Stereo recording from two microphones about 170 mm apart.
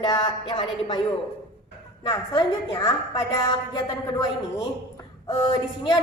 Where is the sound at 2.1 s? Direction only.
25° left (ahead or behind).